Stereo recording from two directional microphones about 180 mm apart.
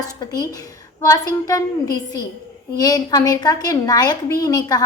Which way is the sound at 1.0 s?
20° left (ahead or behind).